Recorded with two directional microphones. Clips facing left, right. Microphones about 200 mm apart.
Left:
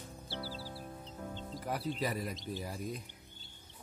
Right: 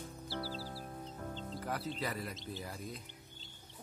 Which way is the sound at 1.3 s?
10° left (ahead or behind).